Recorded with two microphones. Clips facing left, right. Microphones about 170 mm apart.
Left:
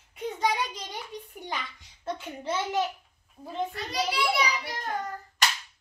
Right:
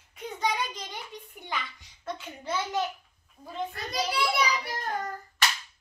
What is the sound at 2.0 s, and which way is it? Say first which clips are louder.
Speech: left 3 dB; 25° left (ahead or behind).